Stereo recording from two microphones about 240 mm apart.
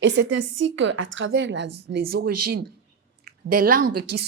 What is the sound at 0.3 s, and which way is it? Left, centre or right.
Speech, right.